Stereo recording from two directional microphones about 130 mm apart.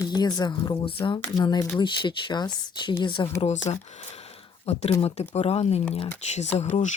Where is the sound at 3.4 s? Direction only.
60° left (ahead or behind).